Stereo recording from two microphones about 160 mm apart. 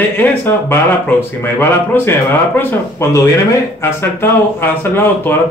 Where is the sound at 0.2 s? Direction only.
15° left (ahead or behind).